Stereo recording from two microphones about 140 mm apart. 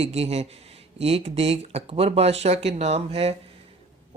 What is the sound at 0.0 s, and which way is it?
Speech, 50° right (ahead or behind).